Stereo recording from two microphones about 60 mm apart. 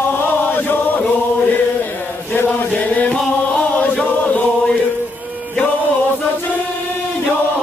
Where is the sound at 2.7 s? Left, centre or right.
Left.